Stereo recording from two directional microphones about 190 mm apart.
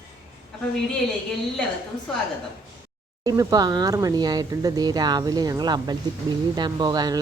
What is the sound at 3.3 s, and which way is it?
A woman's voice, 20° right (ahead or behind).